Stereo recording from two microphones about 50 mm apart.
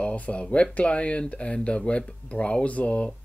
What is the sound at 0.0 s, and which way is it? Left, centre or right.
Speech, left.